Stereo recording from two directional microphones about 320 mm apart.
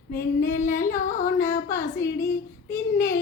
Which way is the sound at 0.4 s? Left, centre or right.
Left.